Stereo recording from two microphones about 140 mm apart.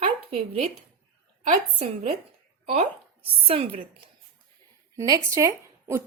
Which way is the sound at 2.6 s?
50° right (ahead or behind).